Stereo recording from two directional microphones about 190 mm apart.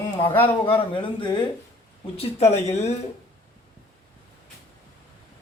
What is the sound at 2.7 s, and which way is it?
Speech, 35° left (ahead or behind).